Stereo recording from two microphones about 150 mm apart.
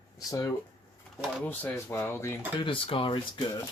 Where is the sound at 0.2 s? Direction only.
20° left (ahead or behind).